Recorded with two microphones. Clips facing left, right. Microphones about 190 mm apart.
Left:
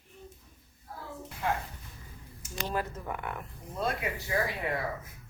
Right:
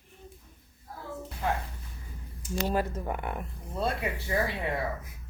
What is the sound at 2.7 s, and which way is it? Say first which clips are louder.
Speech: right 2 dB; 30° right (ahead or behind).